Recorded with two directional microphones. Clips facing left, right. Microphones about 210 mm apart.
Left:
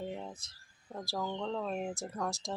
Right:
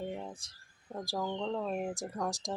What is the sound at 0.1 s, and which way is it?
Speech, 10° right (ahead or behind).